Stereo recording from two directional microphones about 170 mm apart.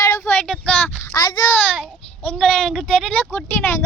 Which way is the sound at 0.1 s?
10° left (ahead or behind).